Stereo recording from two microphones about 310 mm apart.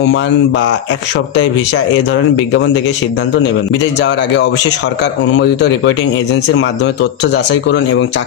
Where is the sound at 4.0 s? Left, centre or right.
Left.